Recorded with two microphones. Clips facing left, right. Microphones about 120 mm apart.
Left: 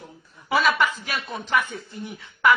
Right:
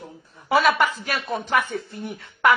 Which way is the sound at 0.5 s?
50° right (ahead or behind).